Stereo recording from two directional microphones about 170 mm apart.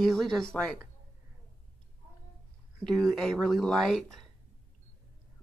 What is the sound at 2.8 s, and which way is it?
Speech, centre (ahead or behind).